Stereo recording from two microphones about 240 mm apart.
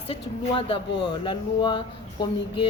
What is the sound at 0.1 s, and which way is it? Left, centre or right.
Speech, left.